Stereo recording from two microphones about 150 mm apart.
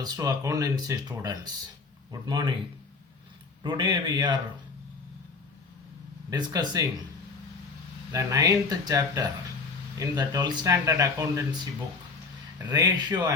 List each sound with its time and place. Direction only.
0.0 s a man's voice: 25° right (ahead or behind)
3.6 s speech: 30° right (ahead or behind)
6.3 s speech: 25° right (ahead or behind)
8.1 s speech: 20° right (ahead or behind)
12.5 s speech: 25° right (ahead or behind)